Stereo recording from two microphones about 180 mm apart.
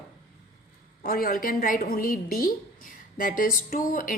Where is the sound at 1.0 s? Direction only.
55° left (ahead or behind).